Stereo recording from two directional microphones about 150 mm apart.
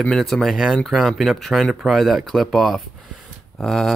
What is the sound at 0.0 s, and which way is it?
Speech, 5° left (ahead or behind).